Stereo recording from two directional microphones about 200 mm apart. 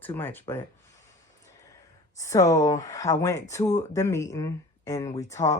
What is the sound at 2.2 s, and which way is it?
Speech, 15° left (ahead or behind).